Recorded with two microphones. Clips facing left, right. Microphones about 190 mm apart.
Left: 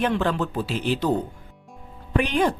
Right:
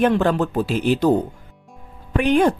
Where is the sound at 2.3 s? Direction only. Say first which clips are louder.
Right 8 dB; 50° right (ahead or behind).